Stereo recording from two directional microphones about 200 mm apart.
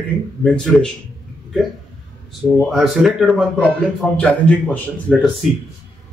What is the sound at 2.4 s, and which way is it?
A man's voice, centre (ahead or behind).